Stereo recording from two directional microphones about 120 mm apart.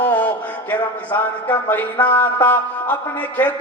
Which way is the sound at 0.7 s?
15° left (ahead or behind).